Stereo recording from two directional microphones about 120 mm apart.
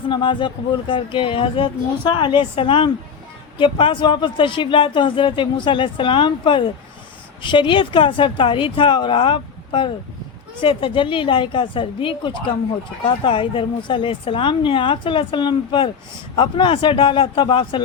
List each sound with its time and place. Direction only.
0.1 s speech: 45° left (ahead or behind)